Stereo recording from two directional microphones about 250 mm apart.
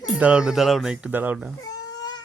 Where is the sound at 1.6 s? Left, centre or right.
Centre.